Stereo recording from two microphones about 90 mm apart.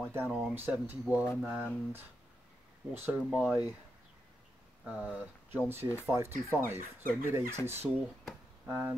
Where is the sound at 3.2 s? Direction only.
10° right (ahead or behind).